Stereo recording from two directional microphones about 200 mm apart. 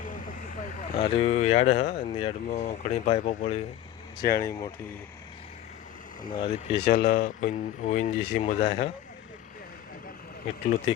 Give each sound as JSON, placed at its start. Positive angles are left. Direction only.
{"t": 0.0, "sound": "vehicle", "side_deg": 40}
{"t": 2.0, "sound": "speech", "side_deg": 25}
{"t": 2.5, "sound": "speech", "side_deg": 35}
{"t": 4.4, "sound": "speech", "side_deg": 15}
{"t": 6.4, "sound": "speech", "side_deg": 35}
{"t": 10.4, "sound": "speech", "side_deg": 40}